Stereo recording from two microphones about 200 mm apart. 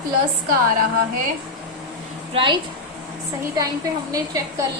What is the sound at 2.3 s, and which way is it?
Speech, 25° right (ahead or behind).